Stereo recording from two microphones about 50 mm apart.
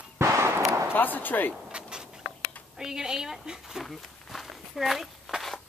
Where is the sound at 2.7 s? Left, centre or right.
Centre.